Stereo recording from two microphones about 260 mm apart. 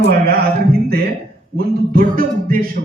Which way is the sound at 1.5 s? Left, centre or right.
Right.